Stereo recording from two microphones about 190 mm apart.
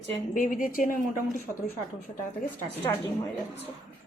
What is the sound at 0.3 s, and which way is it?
A woman's voice, 45° left (ahead or behind).